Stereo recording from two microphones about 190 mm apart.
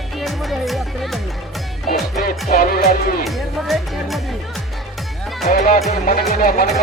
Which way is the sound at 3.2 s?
Centre (ahead or behind).